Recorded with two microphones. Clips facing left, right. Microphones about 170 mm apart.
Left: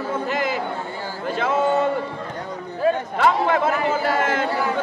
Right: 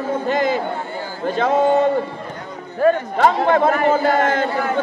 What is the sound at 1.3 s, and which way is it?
Speech, 35° right (ahead or behind).